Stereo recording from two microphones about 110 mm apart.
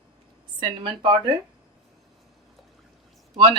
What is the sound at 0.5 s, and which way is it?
Speech, 45° right (ahead or behind).